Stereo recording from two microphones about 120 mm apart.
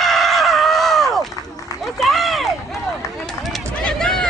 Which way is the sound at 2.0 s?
Centre (ahead or behind).